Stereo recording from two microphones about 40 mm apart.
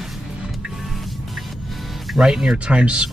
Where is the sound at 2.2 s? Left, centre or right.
Right.